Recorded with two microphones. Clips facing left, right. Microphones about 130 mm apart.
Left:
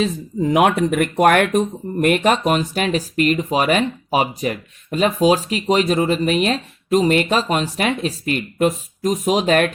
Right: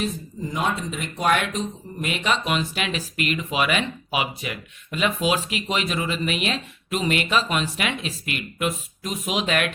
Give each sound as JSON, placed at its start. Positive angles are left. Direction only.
{"t": 0.0, "sound": "speech", "side_deg": 80}